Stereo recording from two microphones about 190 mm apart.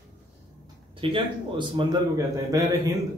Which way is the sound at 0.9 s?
25° right (ahead or behind).